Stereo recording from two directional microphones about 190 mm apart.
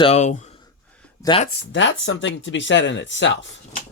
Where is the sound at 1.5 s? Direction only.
70° left (ahead or behind).